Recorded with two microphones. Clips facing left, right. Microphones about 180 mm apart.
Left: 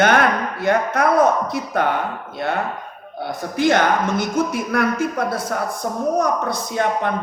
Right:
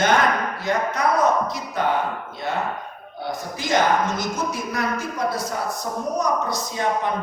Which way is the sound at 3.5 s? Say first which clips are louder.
Left 4 dB; 60° left (ahead or behind).